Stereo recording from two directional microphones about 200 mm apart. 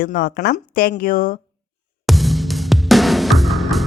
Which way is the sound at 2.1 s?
Centre (ahead or behind).